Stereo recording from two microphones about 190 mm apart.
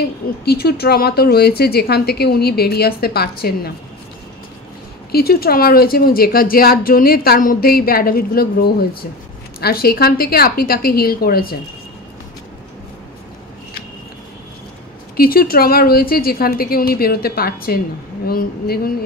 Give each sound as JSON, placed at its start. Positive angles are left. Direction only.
{"t": 0.5, "sound": "a woman's voice", "side_deg": 55}
{"t": 5.1, "sound": "a woman's voice", "side_deg": 55}
{"t": 15.1, "sound": "a woman's voice", "side_deg": 50}